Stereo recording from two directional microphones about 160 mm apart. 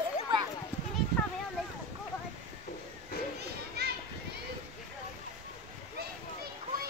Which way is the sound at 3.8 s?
90° right.